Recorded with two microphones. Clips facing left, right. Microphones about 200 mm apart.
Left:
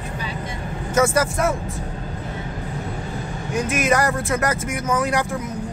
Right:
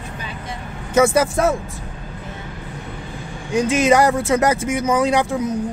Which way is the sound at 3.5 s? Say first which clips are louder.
Right 5 dB; 25° right (ahead or behind).